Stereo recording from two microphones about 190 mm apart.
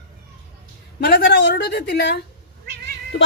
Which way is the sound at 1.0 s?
55° left (ahead or behind).